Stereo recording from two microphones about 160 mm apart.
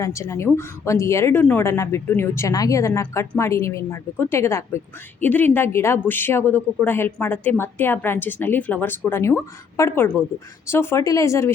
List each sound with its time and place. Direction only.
0.0 s a woman's voice: 20° left (ahead or behind)